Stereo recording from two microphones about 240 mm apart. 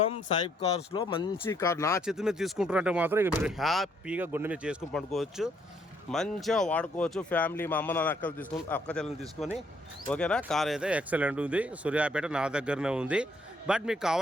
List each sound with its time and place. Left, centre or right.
0.1 s speech: left
2.0 s speech: centre